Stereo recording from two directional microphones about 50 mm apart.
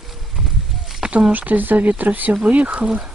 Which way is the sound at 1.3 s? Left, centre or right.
Right.